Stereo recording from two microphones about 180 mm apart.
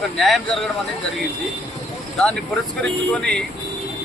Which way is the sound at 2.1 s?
5° left (ahead or behind).